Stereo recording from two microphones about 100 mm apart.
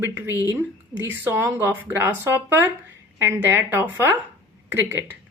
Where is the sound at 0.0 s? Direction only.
20° right (ahead or behind).